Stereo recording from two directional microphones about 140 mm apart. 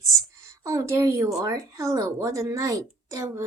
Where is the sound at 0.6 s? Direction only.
25° right (ahead or behind).